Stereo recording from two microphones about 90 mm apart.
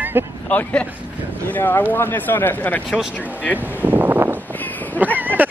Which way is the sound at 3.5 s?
20° right (ahead or behind).